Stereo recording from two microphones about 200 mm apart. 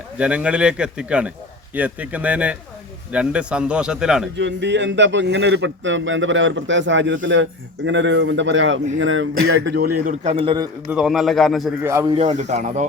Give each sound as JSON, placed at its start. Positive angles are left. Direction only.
{"t": 0.2, "sound": "a man's voice", "side_deg": -5}
{"t": 4.4, "sound": "a man's voice", "side_deg": -60}
{"t": 9.4, "sound": "speech", "side_deg": -90}
{"t": 9.7, "sound": "a man's voice", "side_deg": -45}
{"t": 10.3, "sound": "a man's voice", "side_deg": -25}
{"t": 10.9, "sound": "a man's voice", "side_deg": 0}
{"t": 11.8, "sound": "speech", "side_deg": -15}
{"t": 12.1, "sound": "speech", "side_deg": -35}